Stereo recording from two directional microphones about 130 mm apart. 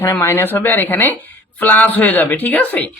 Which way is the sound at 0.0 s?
20° left (ahead or behind).